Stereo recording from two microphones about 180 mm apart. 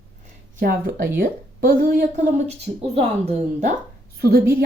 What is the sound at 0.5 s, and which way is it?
A woman's voice, 55° right (ahead or behind).